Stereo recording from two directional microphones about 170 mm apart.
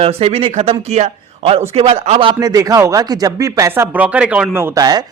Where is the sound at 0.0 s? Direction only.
35° right (ahead or behind).